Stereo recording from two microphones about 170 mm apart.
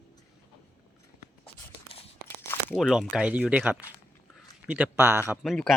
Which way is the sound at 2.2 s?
10° left (ahead or behind).